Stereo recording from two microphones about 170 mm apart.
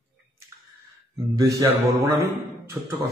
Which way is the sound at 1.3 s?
20° right (ahead or behind).